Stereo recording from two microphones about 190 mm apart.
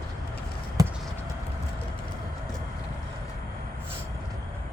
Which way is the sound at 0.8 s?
20° right (ahead or behind).